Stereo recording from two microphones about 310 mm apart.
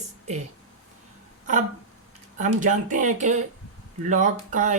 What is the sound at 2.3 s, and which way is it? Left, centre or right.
Speech, right.